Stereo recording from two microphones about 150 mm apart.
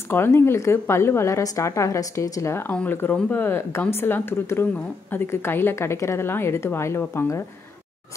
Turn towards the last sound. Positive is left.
turn(degrees=20)  # may be behind; listen again after turning